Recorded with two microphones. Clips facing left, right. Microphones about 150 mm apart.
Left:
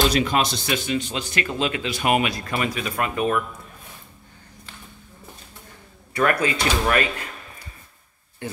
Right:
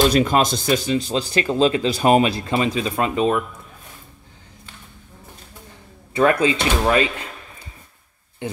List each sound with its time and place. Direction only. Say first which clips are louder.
0.1 s speech: right 4 dB; 45° right (ahead or behind); by 3.4 s 20° right (ahead or behind)
6.1 s speech: right 4 dB; 25° right (ahead or behind)
8.4 s speech: right 4 dB; 20° right (ahead or behind)